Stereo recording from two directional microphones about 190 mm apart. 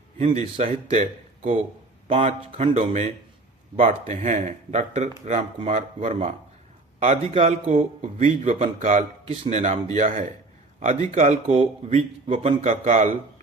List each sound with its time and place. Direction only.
0.2 s a man's voice: 30° right (ahead or behind)
2.0 s a man's voice: 30° right (ahead or behind)